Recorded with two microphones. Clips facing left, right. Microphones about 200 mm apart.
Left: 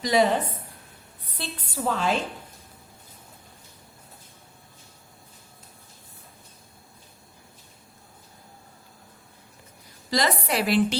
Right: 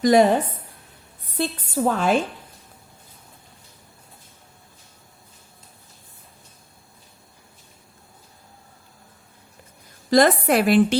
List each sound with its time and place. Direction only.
0.0 s a woman's voice: 50° right (ahead or behind)
1.4 s a woman's voice: 50° right (ahead or behind)
10.1 s a woman's voice: 50° right (ahead or behind)